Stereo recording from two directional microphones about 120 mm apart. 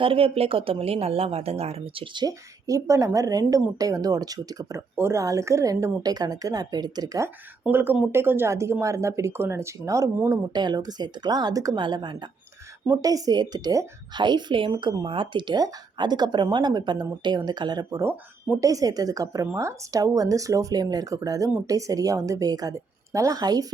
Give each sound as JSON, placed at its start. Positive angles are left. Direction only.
{"t": 0.0, "sound": "a woman's voice", "side_deg": -50}
{"t": 2.1, "sound": "speech", "side_deg": -30}
{"t": 7.6, "sound": "speech", "side_deg": -15}